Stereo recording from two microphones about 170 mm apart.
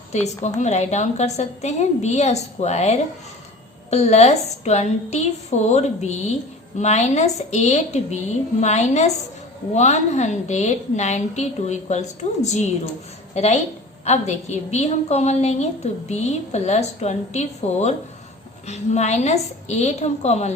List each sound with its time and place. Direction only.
0.1 s a woman's voice: 45° left (ahead or behind)